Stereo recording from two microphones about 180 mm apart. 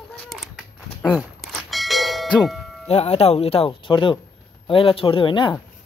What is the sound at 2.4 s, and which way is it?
Speech, centre (ahead or behind).